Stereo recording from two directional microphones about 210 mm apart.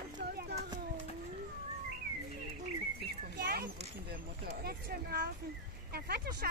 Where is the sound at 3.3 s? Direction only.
50° right (ahead or behind).